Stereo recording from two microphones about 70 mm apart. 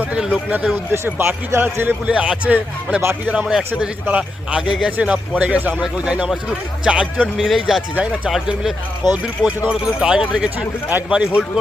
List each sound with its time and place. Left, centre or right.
0.1 s a sound: centre
1.0 s speech: right
2.0 s a man's voice: centre
5.8 s a man's voice: centre
7.3 s speech: centre
9.0 s speech: left
9.6 s a man's voice: centre
10.8 s a man's voice: right